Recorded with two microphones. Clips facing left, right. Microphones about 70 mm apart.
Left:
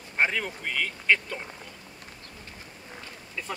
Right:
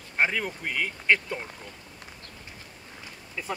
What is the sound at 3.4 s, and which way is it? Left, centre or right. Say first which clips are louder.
Speech: right 2 dB; centre.